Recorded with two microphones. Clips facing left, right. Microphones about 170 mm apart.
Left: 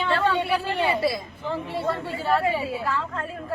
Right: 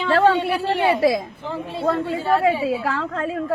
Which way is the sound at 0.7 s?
85° right.